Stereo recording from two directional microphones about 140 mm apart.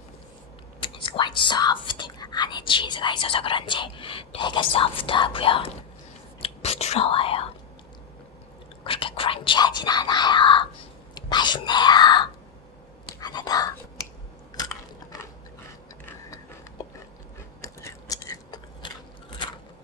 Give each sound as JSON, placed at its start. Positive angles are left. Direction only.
{"t": 0.7, "sound": "speech", "side_deg": 35}
{"t": 6.4, "sound": "whispering", "side_deg": 50}
{"t": 8.8, "sound": "whispering", "side_deg": 40}
{"t": 16.8, "sound": "dog", "side_deg": 25}
{"t": 17.6, "sound": "chewing", "side_deg": 25}